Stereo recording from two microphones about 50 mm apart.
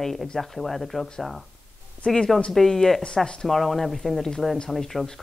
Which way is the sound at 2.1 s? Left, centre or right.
Centre.